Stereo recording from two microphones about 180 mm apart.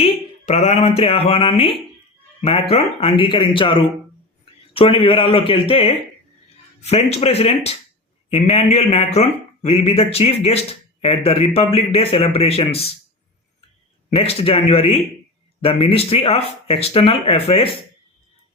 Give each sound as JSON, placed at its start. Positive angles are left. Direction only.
{"t": 0.0, "sound": "a man's voice", "side_deg": 35}
{"t": 14.1, "sound": "a man's voice", "side_deg": 35}